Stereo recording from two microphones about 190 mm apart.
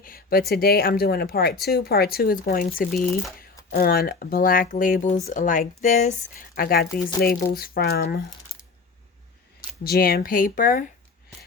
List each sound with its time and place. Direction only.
0.0 s speech: 50° left (ahead or behind)
9.8 s speech: 55° left (ahead or behind)